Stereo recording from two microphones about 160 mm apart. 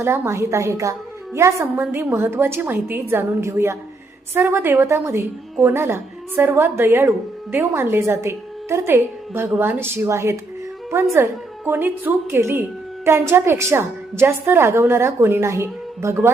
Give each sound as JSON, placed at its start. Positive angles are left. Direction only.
{"t": 0.0, "sound": "a woman's voice", "side_deg": -15}